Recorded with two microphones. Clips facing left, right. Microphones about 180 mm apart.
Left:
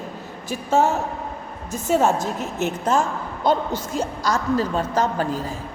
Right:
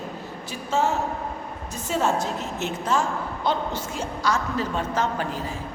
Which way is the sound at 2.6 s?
45° left (ahead or behind).